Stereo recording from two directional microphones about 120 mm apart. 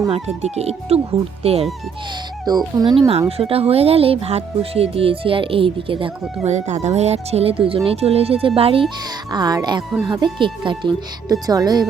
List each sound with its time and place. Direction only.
0.1 s speech: 60° right (ahead or behind)
2.7 s speech: 40° right (ahead or behind)
3.2 s speech: 55° right (ahead or behind)
6.4 s speech: 70° right (ahead or behind); by 8.9 s 50° right (ahead or behind)
9.3 s speech: 35° right (ahead or behind)